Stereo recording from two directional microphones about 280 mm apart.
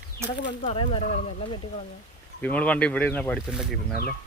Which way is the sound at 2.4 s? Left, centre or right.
Centre.